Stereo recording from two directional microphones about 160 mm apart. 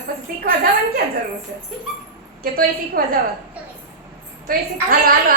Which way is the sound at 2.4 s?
65° right (ahead or behind).